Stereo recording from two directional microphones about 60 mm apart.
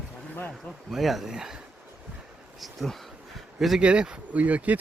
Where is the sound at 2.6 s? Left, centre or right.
Centre.